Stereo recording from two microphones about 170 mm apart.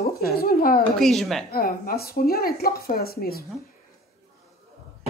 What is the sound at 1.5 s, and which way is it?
Speech, 60° left (ahead or behind).